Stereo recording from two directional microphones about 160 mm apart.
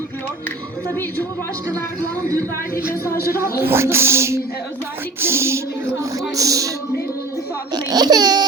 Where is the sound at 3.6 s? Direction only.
15° right (ahead or behind).